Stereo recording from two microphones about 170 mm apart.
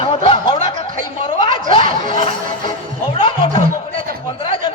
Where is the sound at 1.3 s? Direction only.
30° left (ahead or behind).